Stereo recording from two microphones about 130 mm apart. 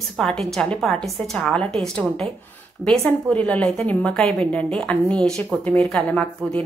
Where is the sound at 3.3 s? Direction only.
10° left (ahead or behind).